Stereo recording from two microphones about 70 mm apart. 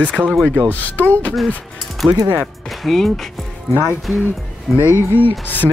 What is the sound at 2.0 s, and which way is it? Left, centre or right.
Speech, right.